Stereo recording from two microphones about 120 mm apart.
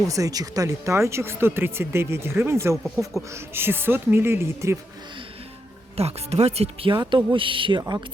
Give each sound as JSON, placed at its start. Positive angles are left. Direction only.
{"t": 0.1, "sound": "speech", "side_deg": -30}
{"t": 6.0, "sound": "speech", "side_deg": -60}
{"t": 6.9, "sound": "speech", "side_deg": -35}